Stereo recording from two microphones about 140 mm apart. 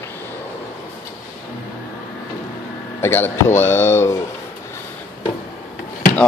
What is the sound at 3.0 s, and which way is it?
Speech, 15° left (ahead or behind).